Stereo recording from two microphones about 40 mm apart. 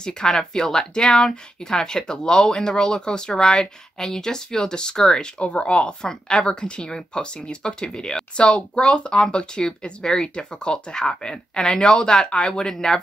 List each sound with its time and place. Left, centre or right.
0.0 s speech: centre
5.4 s speech: left; by 13.0 s centre